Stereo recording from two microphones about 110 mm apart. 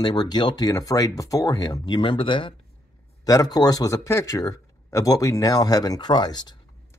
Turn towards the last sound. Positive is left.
turn(degrees=40)  # may be behind; listen again after turning